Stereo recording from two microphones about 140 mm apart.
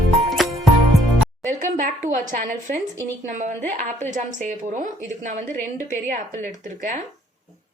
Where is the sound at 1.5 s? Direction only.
65° right (ahead or behind).